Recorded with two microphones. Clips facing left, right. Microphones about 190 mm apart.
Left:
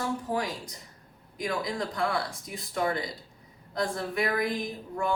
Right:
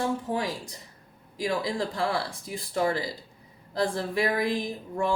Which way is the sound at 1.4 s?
30° right (ahead or behind).